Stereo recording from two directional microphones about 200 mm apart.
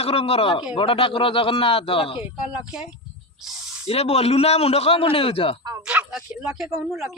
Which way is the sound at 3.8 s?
30° left (ahead or behind).